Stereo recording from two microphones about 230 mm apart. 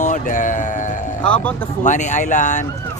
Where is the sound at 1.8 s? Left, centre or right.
Left.